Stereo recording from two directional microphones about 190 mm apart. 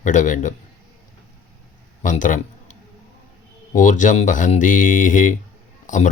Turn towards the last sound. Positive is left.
turn(degrees=40)  # may be behind; listen again after turning